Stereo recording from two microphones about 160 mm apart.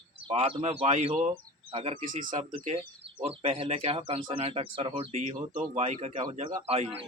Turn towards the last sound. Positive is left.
turn(degrees=-35)  # may be behind; listen again after turning